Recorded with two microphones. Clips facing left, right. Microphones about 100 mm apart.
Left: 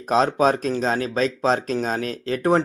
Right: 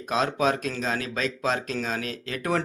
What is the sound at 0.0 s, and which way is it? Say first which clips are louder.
A man's voice: left 6 dB; 35° left (ahead or behind).